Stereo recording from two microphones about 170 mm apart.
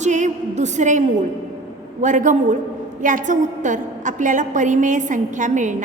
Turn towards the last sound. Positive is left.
turn(degrees=-45)  # may be behind; listen again after turning